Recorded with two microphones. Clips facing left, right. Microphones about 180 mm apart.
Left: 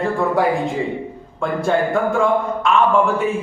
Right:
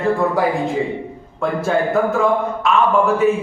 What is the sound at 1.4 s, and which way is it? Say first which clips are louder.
Speech: even; centre (ahead or behind).